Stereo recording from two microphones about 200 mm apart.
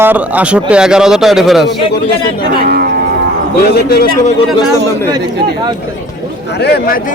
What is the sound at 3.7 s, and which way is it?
Speech, 50° left (ahead or behind).